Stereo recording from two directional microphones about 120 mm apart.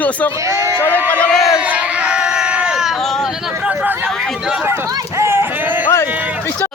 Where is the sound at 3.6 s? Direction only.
15° right (ahead or behind).